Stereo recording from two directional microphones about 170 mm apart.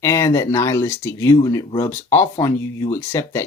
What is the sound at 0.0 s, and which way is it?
Speech, 15° left (ahead or behind).